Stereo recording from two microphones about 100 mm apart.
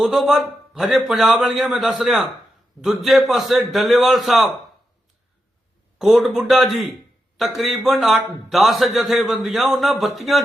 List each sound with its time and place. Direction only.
0.0 s a man's voice: 5° right (ahead or behind)
6.0 s a man's voice: 5° right (ahead or behind)